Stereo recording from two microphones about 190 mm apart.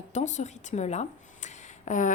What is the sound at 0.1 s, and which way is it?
A woman's voice, 40° left (ahead or behind).